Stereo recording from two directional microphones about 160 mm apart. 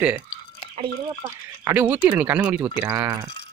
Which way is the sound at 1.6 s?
10° right (ahead or behind).